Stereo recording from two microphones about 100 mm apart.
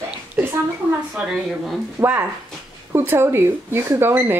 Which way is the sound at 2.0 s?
20° right (ahead or behind).